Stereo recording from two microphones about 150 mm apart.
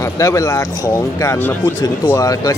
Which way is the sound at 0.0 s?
20° left (ahead or behind).